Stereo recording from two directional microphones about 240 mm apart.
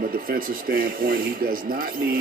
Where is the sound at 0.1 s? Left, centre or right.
Right.